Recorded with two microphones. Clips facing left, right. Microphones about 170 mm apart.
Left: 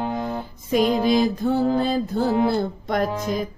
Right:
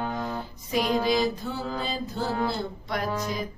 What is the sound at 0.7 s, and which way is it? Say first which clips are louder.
Music: left 6 dB; 50° left (ahead or behind).